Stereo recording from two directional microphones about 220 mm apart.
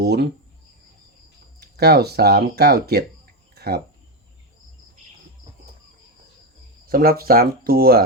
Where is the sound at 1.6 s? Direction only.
45° right (ahead or behind).